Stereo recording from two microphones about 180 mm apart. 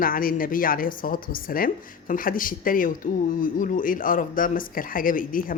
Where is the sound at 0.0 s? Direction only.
50° left (ahead or behind).